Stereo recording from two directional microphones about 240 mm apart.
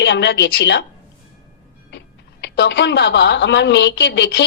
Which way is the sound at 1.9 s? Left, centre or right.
Left.